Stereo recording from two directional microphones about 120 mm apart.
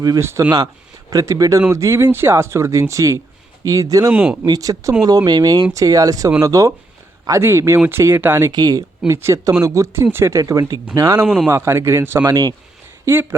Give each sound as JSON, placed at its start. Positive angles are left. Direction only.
{"t": 0.0, "sound": "speech", "side_deg": -30}
{"t": 4.1, "sound": "speech", "side_deg": -10}
{"t": 4.4, "sound": "speech", "side_deg": -30}
{"t": 8.5, "sound": "speech", "side_deg": -35}
{"t": 9.0, "sound": "speech", "side_deg": -25}
{"t": 12.2, "sound": "speech", "side_deg": -30}